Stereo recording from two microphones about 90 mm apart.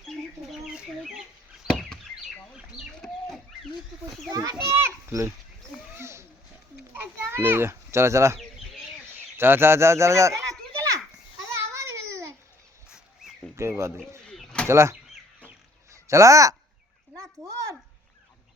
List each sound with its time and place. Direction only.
0.1 s chicken: centre (ahead or behind)
1.7 s knock: 5° right (ahead or behind)
2.5 s chicken: 5° right (ahead or behind)
2.9 s bird: 5° left (ahead or behind)
4.3 s a child's voice: 45° right (ahead or behind)
6.0 s children playing: 30° right (ahead or behind)
6.9 s a sound: 25° right (ahead or behind)
9.1 s speech: 25° right (ahead or behind)
11.5 s a sound: 35° right (ahead or behind)
12.9 s a sound: 5° right (ahead or behind)
13.6 s speech: 30° right (ahead or behind)
14.3 s bird: 10° left (ahead or behind)
14.7 s speech: 30° right (ahead or behind)
15.9 s a sound: 35° right (ahead or behind)